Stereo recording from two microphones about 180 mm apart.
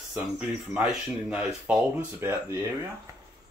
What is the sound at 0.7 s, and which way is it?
Speech, centre (ahead or behind).